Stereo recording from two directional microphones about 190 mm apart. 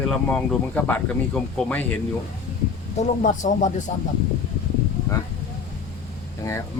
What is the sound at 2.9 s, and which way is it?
Speech, 40° left (ahead or behind).